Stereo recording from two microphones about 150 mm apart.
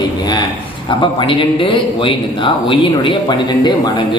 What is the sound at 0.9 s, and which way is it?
A man's voice, 35° left (ahead or behind).